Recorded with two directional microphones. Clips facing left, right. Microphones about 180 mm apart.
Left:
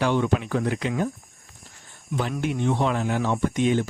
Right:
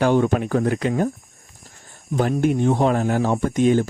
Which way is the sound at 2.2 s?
45° right (ahead or behind).